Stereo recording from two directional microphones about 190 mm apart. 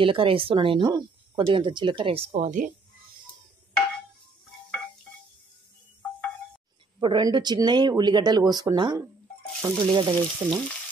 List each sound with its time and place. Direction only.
0.0 s speech: 25° right (ahead or behind)
7.0 s speech: 25° right (ahead or behind)